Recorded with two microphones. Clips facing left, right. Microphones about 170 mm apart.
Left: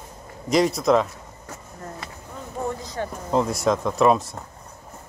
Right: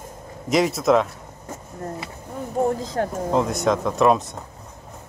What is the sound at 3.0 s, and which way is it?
Speech, 60° right (ahead or behind).